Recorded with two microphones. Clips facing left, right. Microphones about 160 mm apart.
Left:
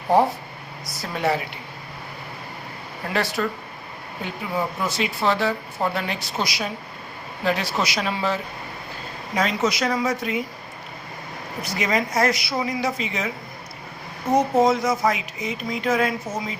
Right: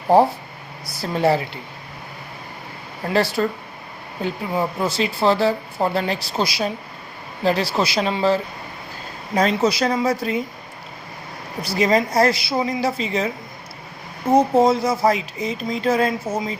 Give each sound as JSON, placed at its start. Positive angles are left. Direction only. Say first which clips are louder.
{"t": 0.9, "sound": "speech", "louder": "right 5 dB", "side_deg": -30}
{"t": 3.1, "sound": "speech", "louder": "right 5 dB", "side_deg": -30}
{"t": 11.6, "sound": "speech", "louder": "right 6 dB", "side_deg": -35}
{"t": 14.3, "sound": "speech", "louder": "right 3 dB", "side_deg": -30}